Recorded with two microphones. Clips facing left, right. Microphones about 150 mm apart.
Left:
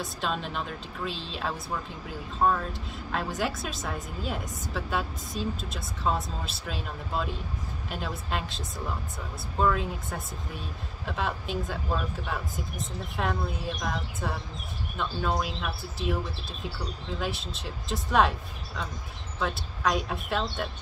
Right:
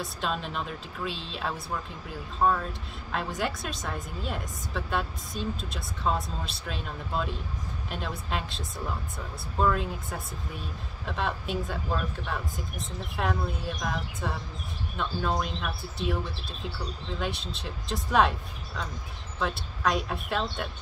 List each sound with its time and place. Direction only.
0.0 s speech: centre (ahead or behind)
17.2 s speech: centre (ahead or behind)
19.4 s speech: centre (ahead or behind)